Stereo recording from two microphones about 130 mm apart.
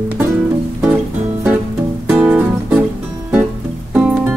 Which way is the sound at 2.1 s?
15° right (ahead or behind).